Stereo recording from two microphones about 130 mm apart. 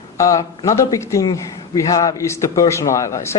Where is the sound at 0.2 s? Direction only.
25° left (ahead or behind).